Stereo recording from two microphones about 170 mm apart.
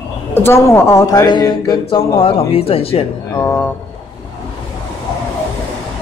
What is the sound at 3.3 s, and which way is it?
Speech, 15° left (ahead or behind).